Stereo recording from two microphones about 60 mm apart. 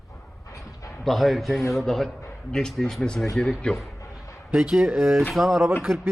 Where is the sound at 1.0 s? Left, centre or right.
Centre.